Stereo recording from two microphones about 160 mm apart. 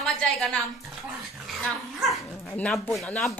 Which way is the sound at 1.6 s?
Centre (ahead or behind).